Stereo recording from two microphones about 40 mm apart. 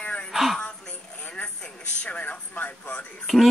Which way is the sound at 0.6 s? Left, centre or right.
Left.